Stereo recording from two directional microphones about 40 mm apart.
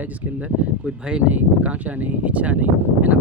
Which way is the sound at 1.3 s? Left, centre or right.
Right.